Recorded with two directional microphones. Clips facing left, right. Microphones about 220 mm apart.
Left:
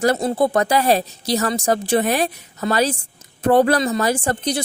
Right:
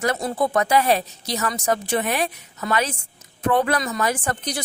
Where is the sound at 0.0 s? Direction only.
30° left (ahead or behind).